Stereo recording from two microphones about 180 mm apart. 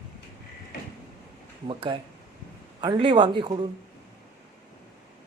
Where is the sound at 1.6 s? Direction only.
30° right (ahead or behind).